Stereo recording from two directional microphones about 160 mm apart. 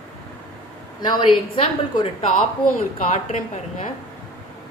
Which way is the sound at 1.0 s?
25° left (ahead or behind).